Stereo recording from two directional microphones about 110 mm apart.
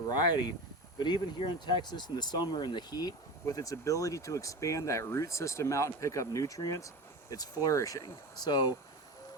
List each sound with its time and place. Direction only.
0.1 s speech: 40° left (ahead or behind)